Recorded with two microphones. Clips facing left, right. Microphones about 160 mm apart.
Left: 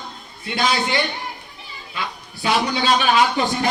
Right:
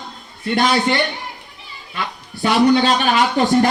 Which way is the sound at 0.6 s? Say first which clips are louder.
Right 3 dB; 45° right (ahead or behind).